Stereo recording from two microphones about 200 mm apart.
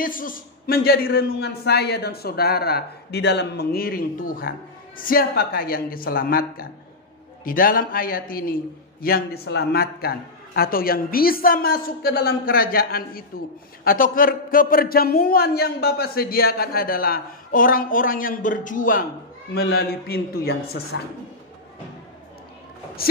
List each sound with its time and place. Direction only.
0.0 s a man's voice: 45° left (ahead or behind)